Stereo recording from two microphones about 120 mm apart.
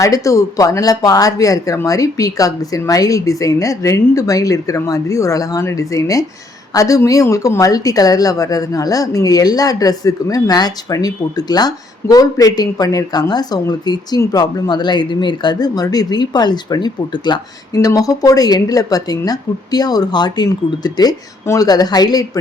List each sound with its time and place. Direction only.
0.0 s speech: 25° left (ahead or behind)